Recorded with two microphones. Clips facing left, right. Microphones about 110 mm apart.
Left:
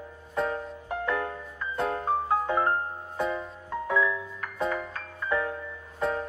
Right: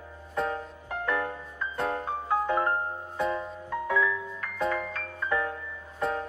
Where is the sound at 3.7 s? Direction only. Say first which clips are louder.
Left 1 dB; 20° left (ahead or behind).